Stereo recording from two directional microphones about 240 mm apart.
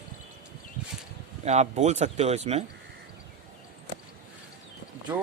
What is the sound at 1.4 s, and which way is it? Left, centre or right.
Speech, right.